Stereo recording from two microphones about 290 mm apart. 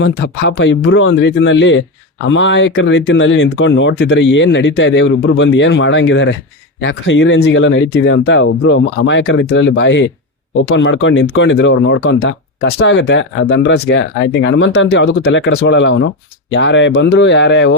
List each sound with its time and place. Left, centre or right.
0.0 s speech: left